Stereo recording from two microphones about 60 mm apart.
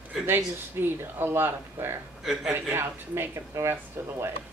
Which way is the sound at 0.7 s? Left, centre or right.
Right.